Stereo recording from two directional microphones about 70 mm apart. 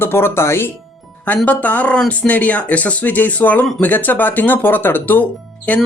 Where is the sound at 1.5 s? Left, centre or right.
Left.